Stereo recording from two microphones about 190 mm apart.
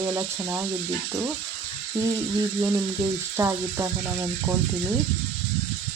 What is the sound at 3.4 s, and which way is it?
Speech, 15° right (ahead or behind).